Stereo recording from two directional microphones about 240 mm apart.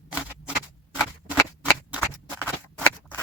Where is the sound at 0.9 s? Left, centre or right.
Centre.